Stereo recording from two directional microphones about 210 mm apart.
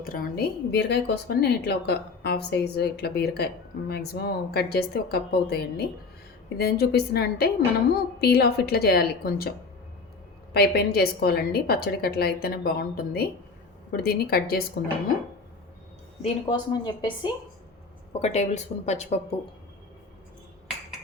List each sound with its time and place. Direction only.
0.0 s a woman's voice: 40° left (ahead or behind)
10.5 s a woman's voice: 50° left (ahead or behind)
16.2 s a woman's voice: 20° left (ahead or behind)
18.2 s speech: 30° left (ahead or behind)